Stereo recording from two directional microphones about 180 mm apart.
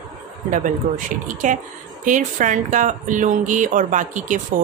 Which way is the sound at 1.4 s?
45° right (ahead or behind).